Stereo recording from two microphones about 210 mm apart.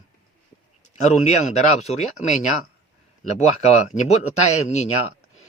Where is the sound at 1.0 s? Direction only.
35° left (ahead or behind).